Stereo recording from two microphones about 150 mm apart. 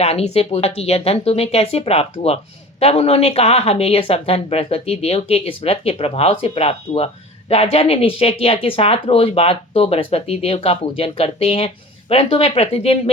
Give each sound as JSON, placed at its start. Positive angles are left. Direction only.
{"t": 0.0, "sound": "a woman's voice", "side_deg": 45}